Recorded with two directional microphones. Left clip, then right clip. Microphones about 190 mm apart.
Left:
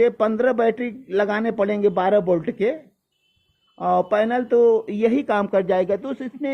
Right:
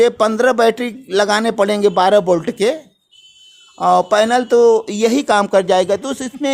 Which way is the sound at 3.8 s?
15° right (ahead or behind).